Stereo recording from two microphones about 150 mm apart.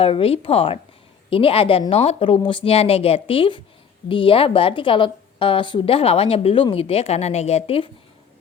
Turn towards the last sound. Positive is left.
turn(degrees=40)  # may be behind; listen again after turning